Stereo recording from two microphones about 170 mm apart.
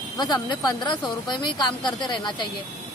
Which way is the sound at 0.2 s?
25° left (ahead or behind).